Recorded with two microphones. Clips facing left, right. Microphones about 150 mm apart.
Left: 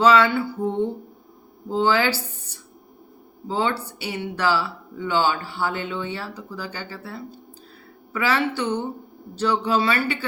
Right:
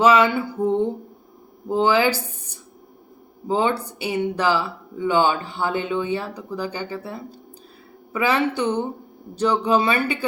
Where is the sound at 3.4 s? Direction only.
15° right (ahead or behind).